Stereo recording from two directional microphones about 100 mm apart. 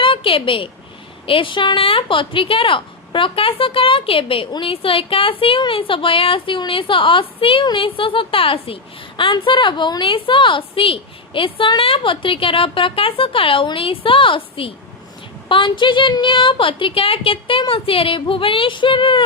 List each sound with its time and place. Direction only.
0.0 s a woman's voice: 60° left (ahead or behind)